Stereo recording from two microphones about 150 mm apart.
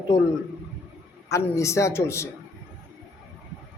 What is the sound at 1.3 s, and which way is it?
Speech, 20° left (ahead or behind).